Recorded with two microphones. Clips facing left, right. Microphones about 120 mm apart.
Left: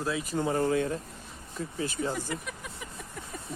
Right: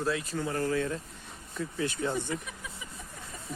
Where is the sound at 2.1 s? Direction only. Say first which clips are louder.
Right 1 dB; 80° left; by 2.8 s 60° left (ahead or behind).